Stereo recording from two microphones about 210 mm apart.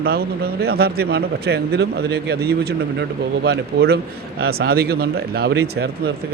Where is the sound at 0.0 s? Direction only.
45° right (ahead or behind).